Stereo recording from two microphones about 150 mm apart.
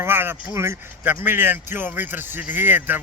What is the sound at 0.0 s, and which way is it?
A man's voice, 15° right (ahead or behind).